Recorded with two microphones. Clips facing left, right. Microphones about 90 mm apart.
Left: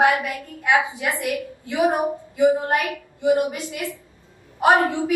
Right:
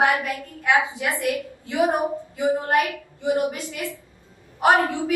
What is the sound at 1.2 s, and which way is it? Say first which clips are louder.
A woman's voice: right 1 dB; 20° left (ahead or behind).